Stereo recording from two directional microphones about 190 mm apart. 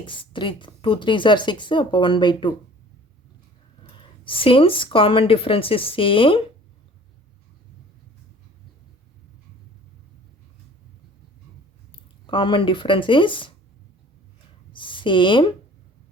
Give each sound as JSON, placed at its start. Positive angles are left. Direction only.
{"t": 0.0, "sound": "speech", "side_deg": 25}
{"t": 3.9, "sound": "speech", "side_deg": 25}
{"t": 11.9, "sound": "speech", "side_deg": 25}
{"t": 14.7, "sound": "a sound", "side_deg": 25}